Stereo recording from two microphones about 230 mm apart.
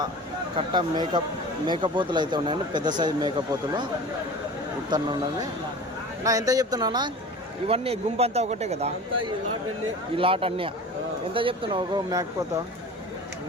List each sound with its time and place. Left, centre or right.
0.5 s speech: centre
4.9 s speech: centre
10.2 s speech: right